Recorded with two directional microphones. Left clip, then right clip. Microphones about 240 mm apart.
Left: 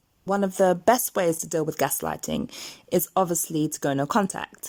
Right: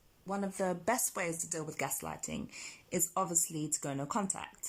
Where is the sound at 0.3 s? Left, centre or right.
Left.